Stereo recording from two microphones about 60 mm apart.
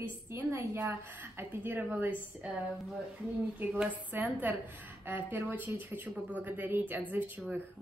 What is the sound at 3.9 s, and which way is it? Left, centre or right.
A woman's voice, right.